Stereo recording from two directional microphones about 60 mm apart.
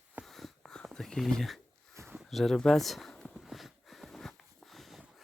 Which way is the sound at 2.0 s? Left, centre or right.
Right.